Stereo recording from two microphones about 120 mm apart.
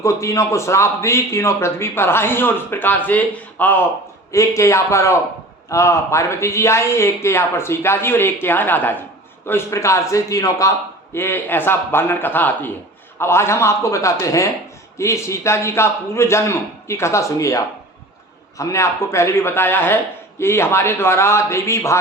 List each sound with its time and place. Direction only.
0.0 s a man's voice: 25° left (ahead or behind)
4.3 s a man's voice: 25° left (ahead or behind)